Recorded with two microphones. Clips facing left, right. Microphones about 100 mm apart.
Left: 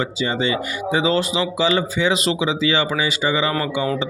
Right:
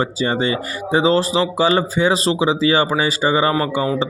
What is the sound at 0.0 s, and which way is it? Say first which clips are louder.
Speech: right 3 dB; 40° right (ahead or behind).